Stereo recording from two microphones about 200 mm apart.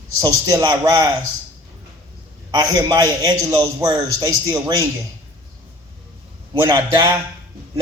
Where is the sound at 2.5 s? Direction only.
20° right (ahead or behind).